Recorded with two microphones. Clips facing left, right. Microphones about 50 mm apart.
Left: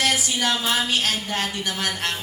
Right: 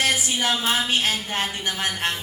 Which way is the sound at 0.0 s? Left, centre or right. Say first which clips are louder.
Even; right.